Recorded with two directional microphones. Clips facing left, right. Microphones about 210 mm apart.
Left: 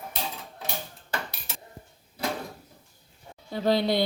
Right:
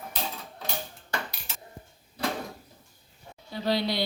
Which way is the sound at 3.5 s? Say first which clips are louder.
Left 4 dB; 50° left (ahead or behind).